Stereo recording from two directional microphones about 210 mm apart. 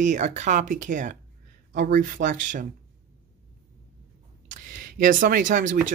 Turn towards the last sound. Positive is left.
turn(degrees=-40)  # may be behind; listen again after turning